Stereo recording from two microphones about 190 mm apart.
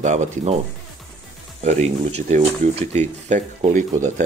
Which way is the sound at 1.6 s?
35° right (ahead or behind).